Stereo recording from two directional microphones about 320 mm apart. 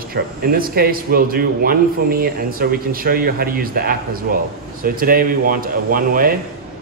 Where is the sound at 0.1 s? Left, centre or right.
Right.